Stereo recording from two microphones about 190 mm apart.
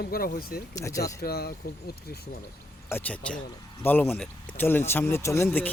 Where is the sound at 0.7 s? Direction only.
15° left (ahead or behind).